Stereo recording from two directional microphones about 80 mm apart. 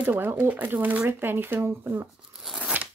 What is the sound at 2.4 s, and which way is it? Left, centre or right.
Crunch, centre.